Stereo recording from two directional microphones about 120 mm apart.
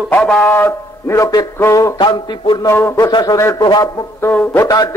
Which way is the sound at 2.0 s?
40° left (ahead or behind).